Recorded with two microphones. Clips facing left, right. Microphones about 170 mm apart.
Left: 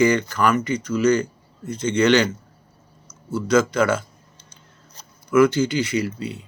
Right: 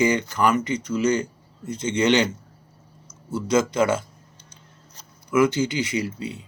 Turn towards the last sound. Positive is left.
turn(degrees=-20)  # may be behind; listen again after turning